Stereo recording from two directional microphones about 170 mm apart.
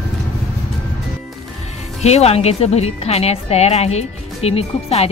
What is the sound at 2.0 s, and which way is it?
Speech, 40° left (ahead or behind).